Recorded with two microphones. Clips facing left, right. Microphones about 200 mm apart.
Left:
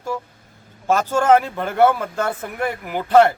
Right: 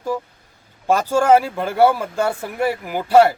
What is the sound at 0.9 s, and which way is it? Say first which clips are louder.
Speech: right 1 dB; 15° right (ahead or behind).